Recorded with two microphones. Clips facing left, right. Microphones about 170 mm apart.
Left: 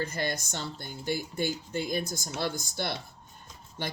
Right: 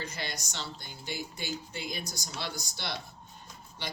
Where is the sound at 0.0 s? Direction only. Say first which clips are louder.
Left 7 dB; 50° left (ahead or behind).